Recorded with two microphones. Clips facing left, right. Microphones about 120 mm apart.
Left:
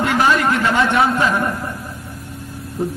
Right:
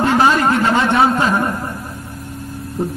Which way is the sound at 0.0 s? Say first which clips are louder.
Right 2 dB; 30° right (ahead or behind).